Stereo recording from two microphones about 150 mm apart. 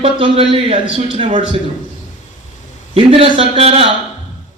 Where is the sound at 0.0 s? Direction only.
40° right (ahead or behind).